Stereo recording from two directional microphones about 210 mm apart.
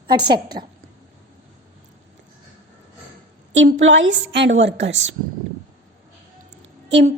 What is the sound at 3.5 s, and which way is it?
A woman's voice, 65° right (ahead or behind).